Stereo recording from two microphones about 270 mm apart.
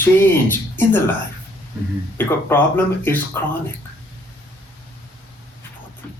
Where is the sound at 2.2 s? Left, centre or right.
Centre.